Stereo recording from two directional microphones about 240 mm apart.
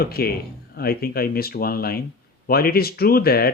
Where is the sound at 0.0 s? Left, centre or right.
Left.